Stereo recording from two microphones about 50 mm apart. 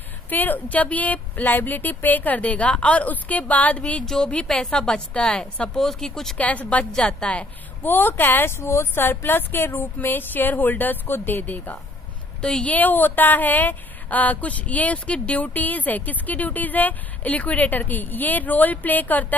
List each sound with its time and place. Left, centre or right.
0.3 s a woman's voice: left
4.0 s a woman's voice: centre
5.8 s speech: centre
6.3 s a woman's voice: left
7.8 s a woman's voice: left
8.5 s speech: left
9.9 s a woman's voice: left
12.4 s a woman's voice: centre
12.6 s a woman's voice: left